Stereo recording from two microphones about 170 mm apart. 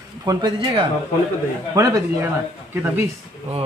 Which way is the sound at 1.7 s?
20° right (ahead or behind).